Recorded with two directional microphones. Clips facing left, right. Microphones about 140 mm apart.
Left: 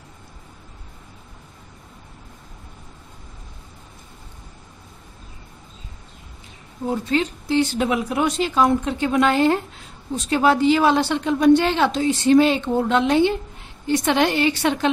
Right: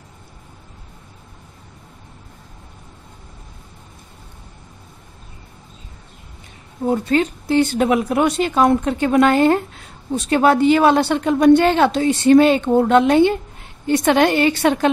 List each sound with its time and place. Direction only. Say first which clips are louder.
6.9 s a woman's voice: right 4 dB; 50° right (ahead or behind)